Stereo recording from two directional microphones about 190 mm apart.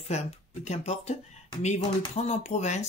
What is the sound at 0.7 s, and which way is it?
Speech, 35° left (ahead or behind).